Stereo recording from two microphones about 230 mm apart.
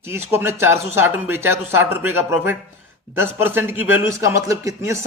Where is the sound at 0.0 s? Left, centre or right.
Centre.